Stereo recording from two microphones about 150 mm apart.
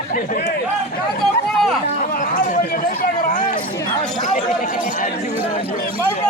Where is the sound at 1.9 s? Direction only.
60° left (ahead or behind).